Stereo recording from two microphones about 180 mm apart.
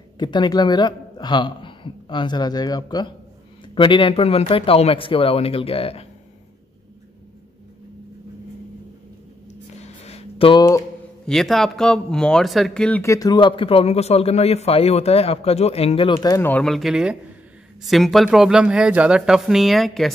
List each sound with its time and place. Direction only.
0.2 s a man's voice: 25° left (ahead or behind)
9.8 s a sound: 35° left (ahead or behind)
11.2 s speech: centre (ahead or behind)
13.0 s a man's voice: 20° left (ahead or behind); by 20.1 s centre (ahead or behind)